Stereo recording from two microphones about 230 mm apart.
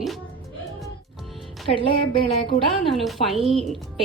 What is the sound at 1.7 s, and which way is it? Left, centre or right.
Speech, left.